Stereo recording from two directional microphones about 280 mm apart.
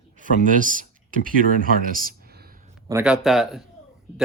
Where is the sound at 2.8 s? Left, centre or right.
Centre.